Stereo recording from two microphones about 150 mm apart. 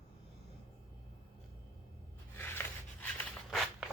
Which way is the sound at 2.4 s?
15° left (ahead or behind).